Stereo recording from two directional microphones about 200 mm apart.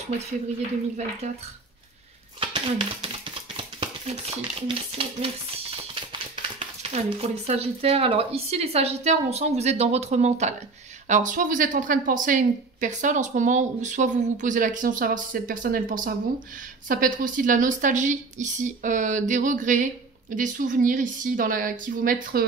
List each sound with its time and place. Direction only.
0.6 s a woman's voice: 35° right (ahead or behind)
2.4 s a woman's voice: 25° right (ahead or behind); by 22.4 s 45° right (ahead or behind)